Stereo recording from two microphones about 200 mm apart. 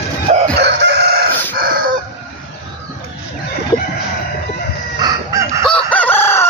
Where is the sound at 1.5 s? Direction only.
45° right (ahead or behind).